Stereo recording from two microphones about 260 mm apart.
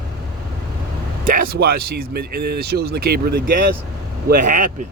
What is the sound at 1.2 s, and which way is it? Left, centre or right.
Speech, right.